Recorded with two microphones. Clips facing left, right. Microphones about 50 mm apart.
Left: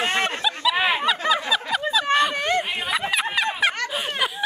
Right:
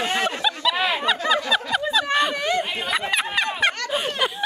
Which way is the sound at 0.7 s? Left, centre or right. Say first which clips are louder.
Left 4 dB; left.